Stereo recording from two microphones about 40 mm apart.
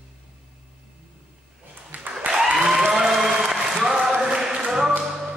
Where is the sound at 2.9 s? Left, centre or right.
Centre.